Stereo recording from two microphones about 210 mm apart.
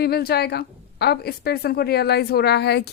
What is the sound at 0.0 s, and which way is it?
A woman's voice, 45° left (ahead or behind).